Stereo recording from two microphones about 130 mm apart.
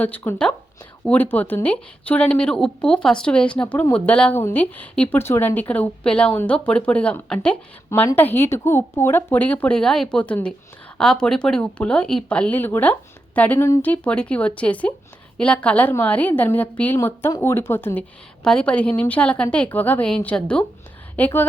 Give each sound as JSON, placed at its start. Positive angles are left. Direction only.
{"t": 0.0, "sound": "speech", "side_deg": 15}